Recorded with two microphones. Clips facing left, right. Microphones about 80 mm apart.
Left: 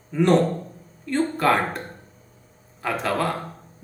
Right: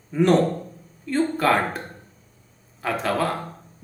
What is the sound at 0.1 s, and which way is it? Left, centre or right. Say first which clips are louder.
A man's voice: even; centre.